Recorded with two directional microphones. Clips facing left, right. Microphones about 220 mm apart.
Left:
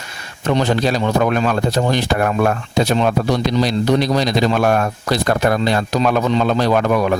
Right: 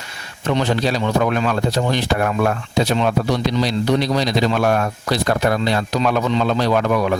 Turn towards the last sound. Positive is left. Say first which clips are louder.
# left 2 dB
turn(degrees=45)  # may be behind; listen again after turning